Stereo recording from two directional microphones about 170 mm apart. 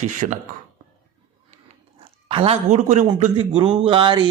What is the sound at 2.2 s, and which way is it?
A man's voice, 35° right (ahead or behind).